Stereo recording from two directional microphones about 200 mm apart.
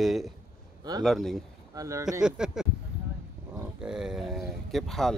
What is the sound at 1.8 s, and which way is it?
Speech, 15° right (ahead or behind).